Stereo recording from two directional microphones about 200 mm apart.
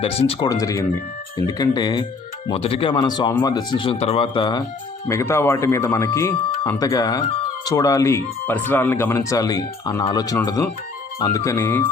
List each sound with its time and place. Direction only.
0.0 s speech: 30° left (ahead or behind)
5.0 s speech: 15° left (ahead or behind)